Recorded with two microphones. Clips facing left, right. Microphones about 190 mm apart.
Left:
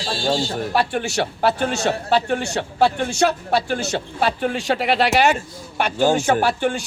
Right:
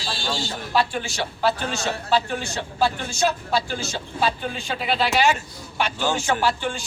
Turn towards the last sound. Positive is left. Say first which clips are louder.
# left 4 dB
turn(degrees=60)  # may be behind; listen again after turning